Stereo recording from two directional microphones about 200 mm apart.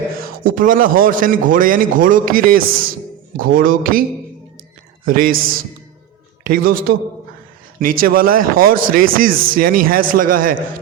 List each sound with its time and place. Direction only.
0.2 s a man's voice: 45° right (ahead or behind)
5.0 s a man's voice: 45° right (ahead or behind)
6.7 s a man's voice: 45° right (ahead or behind)